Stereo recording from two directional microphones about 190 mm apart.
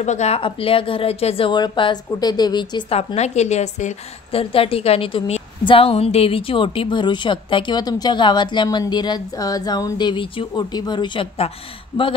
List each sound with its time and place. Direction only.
0.0 s a woman's voice: 35° left (ahead or behind)